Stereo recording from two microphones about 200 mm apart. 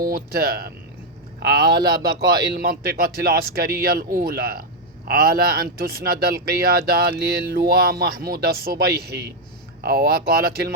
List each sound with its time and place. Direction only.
0.0 s speech: 50° right (ahead or behind)
1.7 s speech: 20° right (ahead or behind)
2.5 s speech: 50° right (ahead or behind)